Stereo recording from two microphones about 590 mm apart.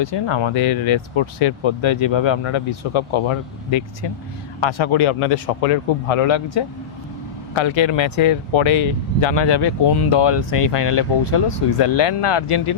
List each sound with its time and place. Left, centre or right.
0.0 s speech: left
10.3 s speech: left
11.2 s speech: left
11.8 s speech: left